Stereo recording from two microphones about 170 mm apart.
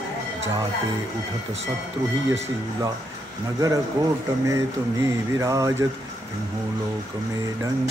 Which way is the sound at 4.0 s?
25° right (ahead or behind).